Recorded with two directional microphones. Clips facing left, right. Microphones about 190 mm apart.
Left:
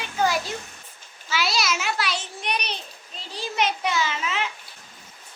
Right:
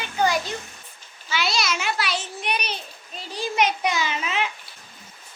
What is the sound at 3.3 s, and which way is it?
Children playing, 15° right (ahead or behind).